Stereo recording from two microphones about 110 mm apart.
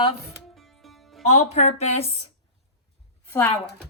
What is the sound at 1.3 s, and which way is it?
Speech, 80° left.